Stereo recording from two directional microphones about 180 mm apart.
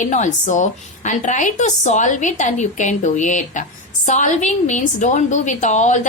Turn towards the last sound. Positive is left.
turn(degrees=40)  # may be behind; listen again after turning